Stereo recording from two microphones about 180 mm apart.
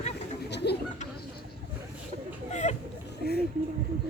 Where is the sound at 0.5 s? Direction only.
70° left (ahead or behind).